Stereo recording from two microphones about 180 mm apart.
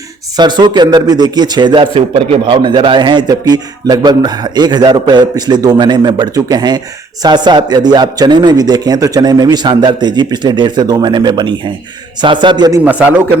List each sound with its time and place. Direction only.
0.3 s a man's voice: 25° right (ahead or behind)
12.8 s speech: 10° right (ahead or behind)